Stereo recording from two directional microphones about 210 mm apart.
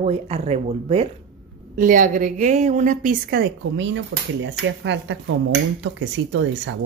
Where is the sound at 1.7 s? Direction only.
40° right (ahead or behind).